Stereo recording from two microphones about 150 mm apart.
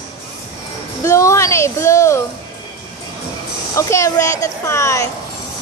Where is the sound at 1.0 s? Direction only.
20° left (ahead or behind).